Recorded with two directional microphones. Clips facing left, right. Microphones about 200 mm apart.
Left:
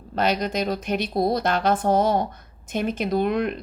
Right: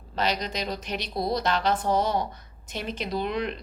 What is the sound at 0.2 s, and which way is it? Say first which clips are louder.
Speech: left 5 dB; 50° left (ahead or behind).